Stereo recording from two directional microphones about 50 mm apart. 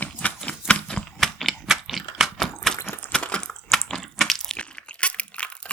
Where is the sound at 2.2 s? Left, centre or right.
Centre.